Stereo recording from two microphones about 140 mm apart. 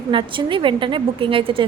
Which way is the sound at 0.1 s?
35° right (ahead or behind).